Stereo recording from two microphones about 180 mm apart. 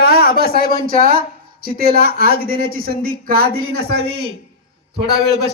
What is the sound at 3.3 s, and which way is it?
Speech, 55° right (ahead or behind).